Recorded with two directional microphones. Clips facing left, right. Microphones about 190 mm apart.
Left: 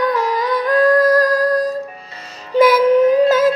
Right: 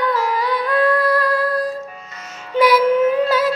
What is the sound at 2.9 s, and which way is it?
Child singing, 40° left (ahead or behind).